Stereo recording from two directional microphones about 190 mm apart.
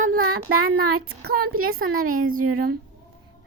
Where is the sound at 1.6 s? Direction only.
90° right.